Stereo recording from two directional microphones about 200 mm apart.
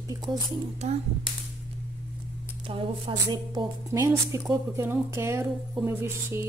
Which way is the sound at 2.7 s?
25° right (ahead or behind).